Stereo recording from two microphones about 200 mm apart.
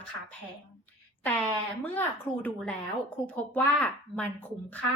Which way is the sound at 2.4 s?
5° left (ahead or behind).